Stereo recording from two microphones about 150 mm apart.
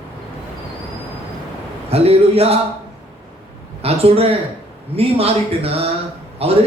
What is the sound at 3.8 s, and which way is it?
A man's voice, 40° right (ahead or behind).